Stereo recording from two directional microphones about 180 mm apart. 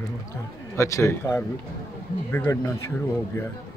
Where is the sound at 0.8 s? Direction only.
15° left (ahead or behind).